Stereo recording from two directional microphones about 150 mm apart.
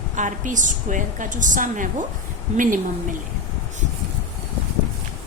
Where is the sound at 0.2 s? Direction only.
55° right (ahead or behind).